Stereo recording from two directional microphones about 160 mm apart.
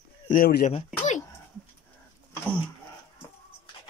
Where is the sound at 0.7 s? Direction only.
45° left (ahead or behind).